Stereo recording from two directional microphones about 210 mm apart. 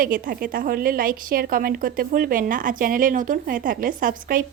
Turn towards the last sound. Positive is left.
turn(degrees=-40)  # may be behind; listen again after turning